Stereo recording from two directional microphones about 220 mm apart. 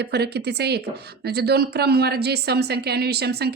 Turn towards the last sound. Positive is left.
turn(degrees=-45)  # may be behind; listen again after turning